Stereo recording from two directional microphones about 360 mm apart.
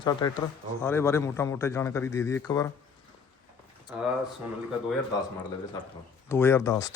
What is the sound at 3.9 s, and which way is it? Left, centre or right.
Speech, centre.